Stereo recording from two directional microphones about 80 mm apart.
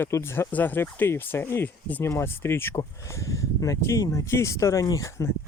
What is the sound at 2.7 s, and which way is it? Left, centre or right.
Speech, left.